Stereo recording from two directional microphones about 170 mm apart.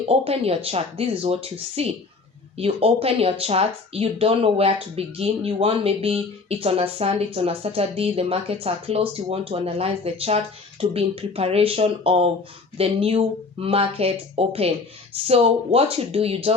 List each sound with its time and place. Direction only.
0.1 s speech: 35° right (ahead or behind)